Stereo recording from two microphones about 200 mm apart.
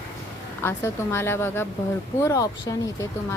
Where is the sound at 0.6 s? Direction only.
10° left (ahead or behind).